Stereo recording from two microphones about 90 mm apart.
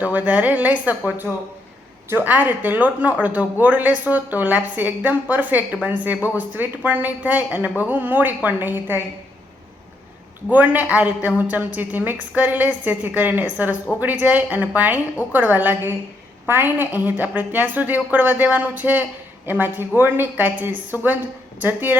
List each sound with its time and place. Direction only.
0.0 s a woman's voice: 15° right (ahead or behind)
10.5 s a woman's voice: 20° right (ahead or behind)